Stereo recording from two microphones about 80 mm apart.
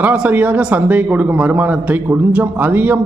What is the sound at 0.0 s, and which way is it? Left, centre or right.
Speech, centre.